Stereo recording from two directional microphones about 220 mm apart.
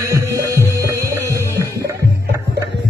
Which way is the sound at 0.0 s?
15° right (ahead or behind).